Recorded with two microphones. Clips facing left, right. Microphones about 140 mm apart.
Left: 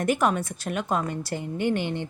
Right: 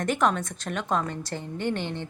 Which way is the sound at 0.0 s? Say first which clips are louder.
Left 1 dB; 10° left (ahead or behind).